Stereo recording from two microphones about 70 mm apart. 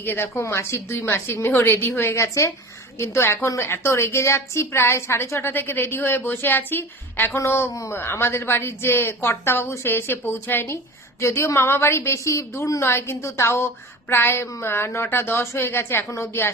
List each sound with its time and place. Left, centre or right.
0.0 s a woman's voice: left
7.7 s a woman's voice: left
7.9 s a woman's voice: left
11.2 s a woman's voice: left